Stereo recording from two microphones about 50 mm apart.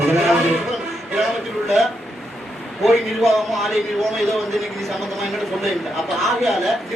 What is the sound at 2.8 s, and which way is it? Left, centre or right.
A man's voice, centre.